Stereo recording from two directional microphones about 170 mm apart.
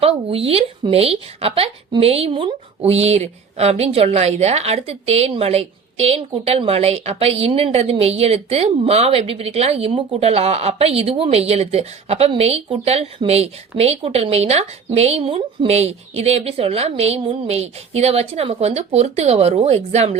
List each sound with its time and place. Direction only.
0.0 s a woman's voice: 35° right (ahead or behind)